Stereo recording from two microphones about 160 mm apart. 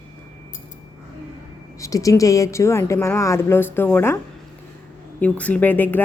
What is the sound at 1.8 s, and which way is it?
Speech, 20° left (ahead or behind).